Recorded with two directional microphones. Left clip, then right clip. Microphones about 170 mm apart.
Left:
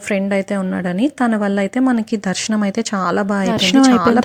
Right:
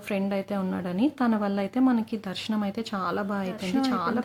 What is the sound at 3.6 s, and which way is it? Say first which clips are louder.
Speech: left 18 dB; 55° left (ahead or behind).